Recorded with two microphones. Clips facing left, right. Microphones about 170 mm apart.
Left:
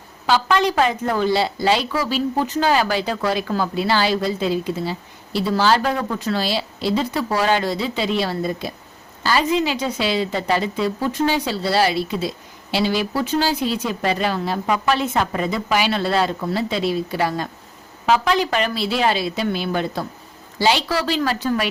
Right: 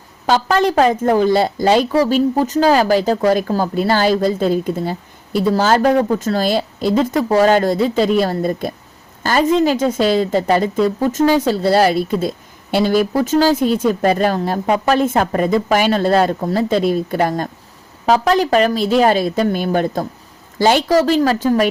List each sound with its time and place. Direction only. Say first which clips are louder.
0.3 s a woman's voice: right 3 dB; 45° right (ahead or behind)